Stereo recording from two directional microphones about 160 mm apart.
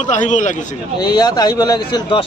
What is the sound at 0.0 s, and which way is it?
Speech, 50° left (ahead or behind).